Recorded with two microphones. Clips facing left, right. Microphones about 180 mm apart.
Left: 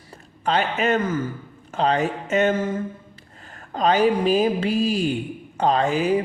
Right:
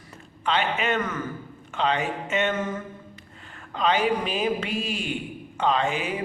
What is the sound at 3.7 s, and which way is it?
Speech, 40° left (ahead or behind).